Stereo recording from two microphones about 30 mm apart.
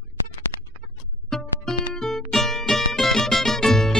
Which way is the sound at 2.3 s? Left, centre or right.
Centre.